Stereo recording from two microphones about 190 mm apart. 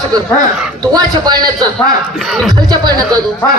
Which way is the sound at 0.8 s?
20° right (ahead or behind).